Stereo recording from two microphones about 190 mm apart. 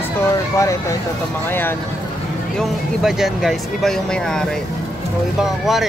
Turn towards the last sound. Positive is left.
turn(degrees=0)  # may be behind; listen again after turning